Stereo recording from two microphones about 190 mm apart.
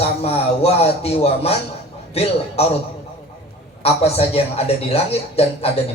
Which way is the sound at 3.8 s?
30° left (ahead or behind).